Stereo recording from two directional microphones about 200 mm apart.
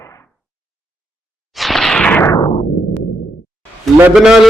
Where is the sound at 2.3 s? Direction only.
25° left (ahead or behind).